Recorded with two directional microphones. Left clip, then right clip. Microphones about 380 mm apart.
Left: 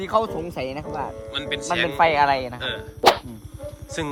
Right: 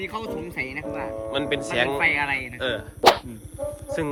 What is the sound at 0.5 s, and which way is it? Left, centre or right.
Speech, right.